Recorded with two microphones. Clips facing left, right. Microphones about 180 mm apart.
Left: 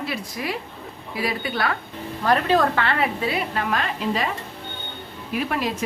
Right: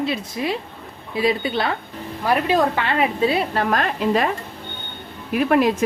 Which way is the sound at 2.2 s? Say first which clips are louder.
Right 1 dB; 15° right (ahead or behind).